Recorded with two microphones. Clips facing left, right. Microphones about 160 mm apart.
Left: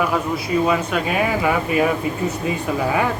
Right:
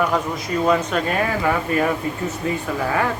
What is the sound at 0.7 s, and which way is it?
Speech, 10° left (ahead or behind).